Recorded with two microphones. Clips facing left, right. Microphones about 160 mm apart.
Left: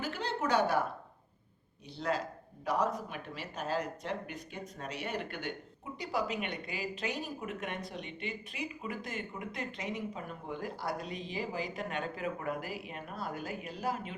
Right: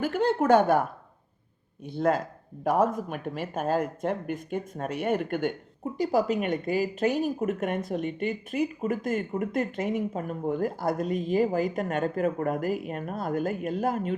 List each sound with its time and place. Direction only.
0.0 s speech: 50° right (ahead or behind)